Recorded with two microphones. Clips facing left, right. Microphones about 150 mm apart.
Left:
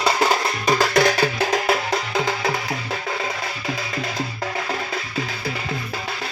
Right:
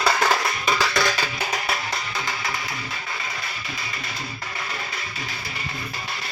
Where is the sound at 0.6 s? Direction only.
45° left (ahead or behind).